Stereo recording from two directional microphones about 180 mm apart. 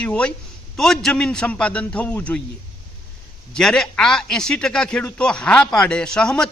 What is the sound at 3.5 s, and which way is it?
A man's voice, 5° left (ahead or behind).